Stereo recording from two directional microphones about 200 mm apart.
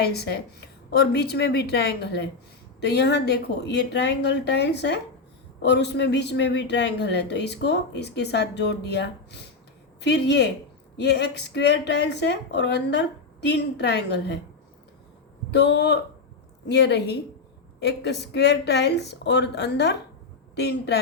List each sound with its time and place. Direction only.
0.0 s a man's voice: 55° left (ahead or behind)
15.4 s a man's voice: 60° left (ahead or behind)